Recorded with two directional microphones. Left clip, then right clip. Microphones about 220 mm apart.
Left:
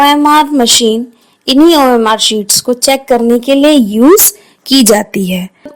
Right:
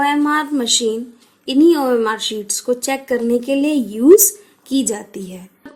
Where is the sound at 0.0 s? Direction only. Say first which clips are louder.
Left 10 dB; 35° left (ahead or behind).